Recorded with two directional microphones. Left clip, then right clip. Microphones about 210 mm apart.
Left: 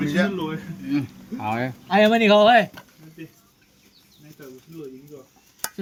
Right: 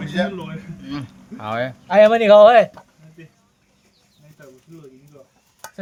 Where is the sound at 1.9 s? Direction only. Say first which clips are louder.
Right 6 dB; 45° right (ahead or behind).